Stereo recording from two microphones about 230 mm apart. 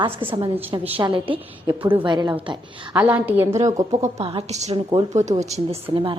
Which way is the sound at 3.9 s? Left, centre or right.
Right.